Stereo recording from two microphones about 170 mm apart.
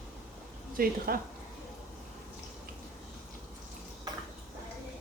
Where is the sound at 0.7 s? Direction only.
60° right (ahead or behind).